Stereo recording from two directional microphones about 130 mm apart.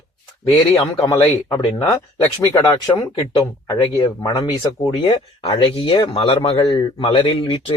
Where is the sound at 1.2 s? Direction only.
30° left (ahead or behind).